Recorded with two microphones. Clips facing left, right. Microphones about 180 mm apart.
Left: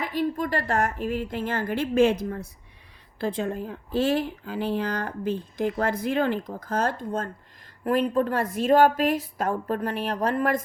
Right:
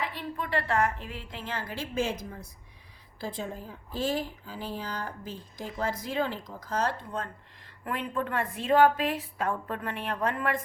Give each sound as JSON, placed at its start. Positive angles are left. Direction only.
{"t": 0.0, "sound": "a woman's voice", "side_deg": 40}